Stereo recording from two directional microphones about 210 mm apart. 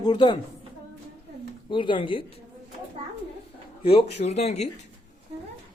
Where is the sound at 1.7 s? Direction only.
25° left (ahead or behind).